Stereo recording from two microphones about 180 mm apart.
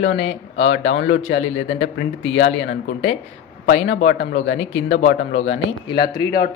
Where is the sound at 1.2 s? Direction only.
35° left (ahead or behind).